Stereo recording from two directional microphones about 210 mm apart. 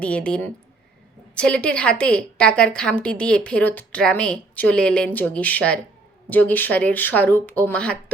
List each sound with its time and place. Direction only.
0.0 s a woman's voice: 5° left (ahead or behind)